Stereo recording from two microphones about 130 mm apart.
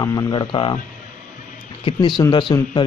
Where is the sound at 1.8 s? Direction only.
35° left (ahead or behind).